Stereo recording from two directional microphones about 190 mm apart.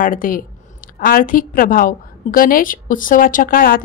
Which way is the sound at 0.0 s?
45° left (ahead or behind).